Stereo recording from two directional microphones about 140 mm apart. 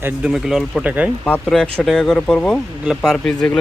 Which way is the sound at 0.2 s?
5° right (ahead or behind).